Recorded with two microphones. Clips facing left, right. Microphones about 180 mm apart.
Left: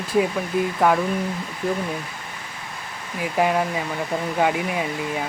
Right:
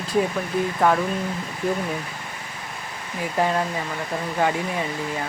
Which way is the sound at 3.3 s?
10° left (ahead or behind).